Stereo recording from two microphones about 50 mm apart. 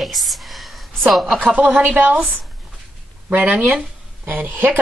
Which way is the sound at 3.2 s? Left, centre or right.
Right.